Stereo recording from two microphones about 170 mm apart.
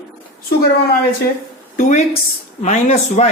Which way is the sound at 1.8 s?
45° left (ahead or behind).